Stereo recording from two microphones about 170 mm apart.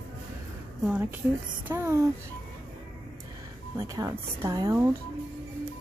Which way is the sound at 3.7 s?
20° right (ahead or behind).